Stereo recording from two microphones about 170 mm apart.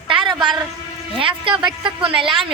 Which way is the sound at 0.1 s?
30° right (ahead or behind).